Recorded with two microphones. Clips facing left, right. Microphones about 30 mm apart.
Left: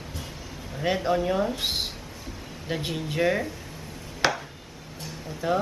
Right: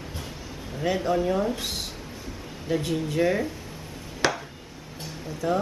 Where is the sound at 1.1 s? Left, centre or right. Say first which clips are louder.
Right 1 dB; centre.